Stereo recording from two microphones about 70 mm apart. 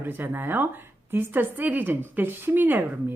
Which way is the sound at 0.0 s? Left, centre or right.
Right.